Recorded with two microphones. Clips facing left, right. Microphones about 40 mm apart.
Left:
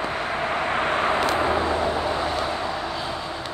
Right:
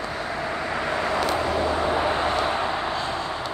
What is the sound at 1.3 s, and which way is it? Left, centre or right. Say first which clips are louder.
Vehicle: left 2 dB; left.